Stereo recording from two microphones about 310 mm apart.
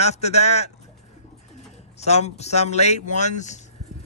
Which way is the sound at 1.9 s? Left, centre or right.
Left.